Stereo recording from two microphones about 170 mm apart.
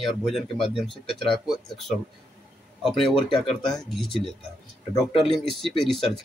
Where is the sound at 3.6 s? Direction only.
Centre (ahead or behind).